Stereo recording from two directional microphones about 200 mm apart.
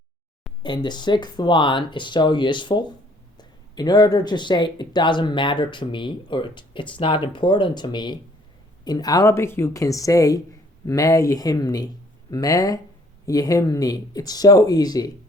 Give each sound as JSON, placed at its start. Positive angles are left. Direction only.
{"t": 0.6, "sound": "speech", "side_deg": 20}